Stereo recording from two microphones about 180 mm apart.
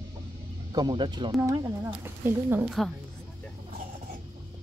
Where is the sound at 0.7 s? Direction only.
25° right (ahead or behind).